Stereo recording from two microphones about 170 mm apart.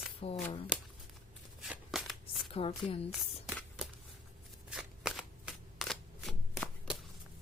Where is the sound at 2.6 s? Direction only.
35° left (ahead or behind).